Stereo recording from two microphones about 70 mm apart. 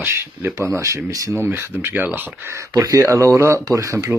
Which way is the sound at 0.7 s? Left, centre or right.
Right.